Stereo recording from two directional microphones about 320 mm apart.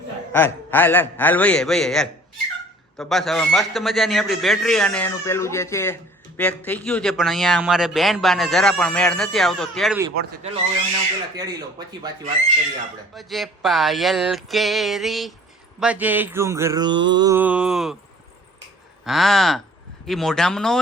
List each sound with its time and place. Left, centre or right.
0.3 s a man's voice: centre
10.2 s speech: right
11.3 s mantra: centre
13.1 s a man's voice: centre
15.8 s mantra: centre
19.0 s a man's voice: centre